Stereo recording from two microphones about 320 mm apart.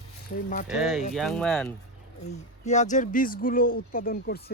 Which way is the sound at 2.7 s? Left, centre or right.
Left.